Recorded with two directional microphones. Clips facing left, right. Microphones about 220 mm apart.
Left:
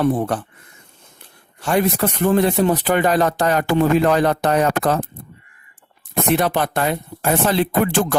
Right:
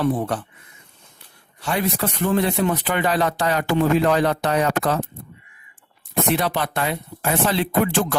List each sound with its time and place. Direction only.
0.0 s speech: 50° left (ahead or behind)
1.6 s speech: 50° left (ahead or behind)
6.3 s speech: 50° left (ahead or behind)